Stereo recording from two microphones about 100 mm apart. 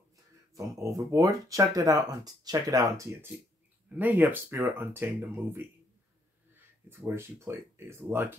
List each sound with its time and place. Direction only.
0.6 s speech: 35° right (ahead or behind)
6.9 s speech: 25° right (ahead or behind)